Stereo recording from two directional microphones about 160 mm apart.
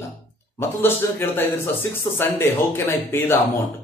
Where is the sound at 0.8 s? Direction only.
15° left (ahead or behind).